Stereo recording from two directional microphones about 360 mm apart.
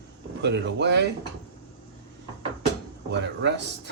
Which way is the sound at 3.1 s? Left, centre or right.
Right.